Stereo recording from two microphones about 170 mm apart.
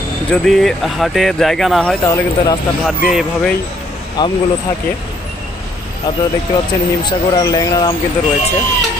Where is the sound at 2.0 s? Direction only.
20° left (ahead or behind).